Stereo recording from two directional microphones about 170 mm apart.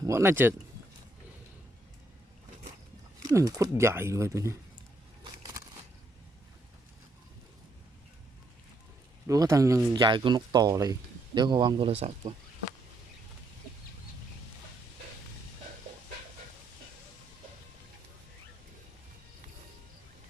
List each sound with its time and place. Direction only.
0.0 s speech: 15° right (ahead or behind)
3.2 s speech: 20° right (ahead or behind)
9.2 s speech: 20° right (ahead or behind); by 12.1 s 35° right (ahead or behind)